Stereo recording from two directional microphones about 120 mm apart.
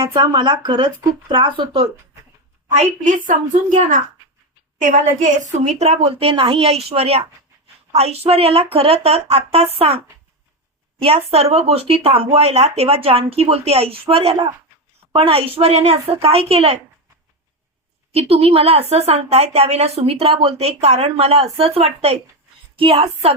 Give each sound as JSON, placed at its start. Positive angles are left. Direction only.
{"t": 0.0, "sound": "a woman's voice", "side_deg": -40}
{"t": 2.7, "sound": "a woman's voice", "side_deg": -90}
{"t": 11.0, "sound": "a woman's voice", "side_deg": -55}
{"t": 18.1, "sound": "a woman's voice", "side_deg": -60}